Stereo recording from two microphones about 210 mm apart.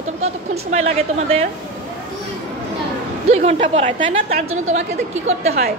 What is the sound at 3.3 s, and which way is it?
Speech, 30° right (ahead or behind).